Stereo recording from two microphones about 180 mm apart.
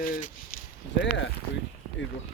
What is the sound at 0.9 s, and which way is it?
Speech, 90° left.